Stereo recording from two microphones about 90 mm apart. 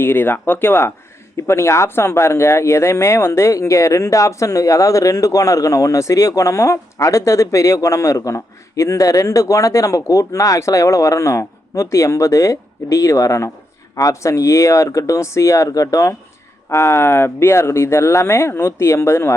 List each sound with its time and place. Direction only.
0.0 s speech: 25° left (ahead or behind)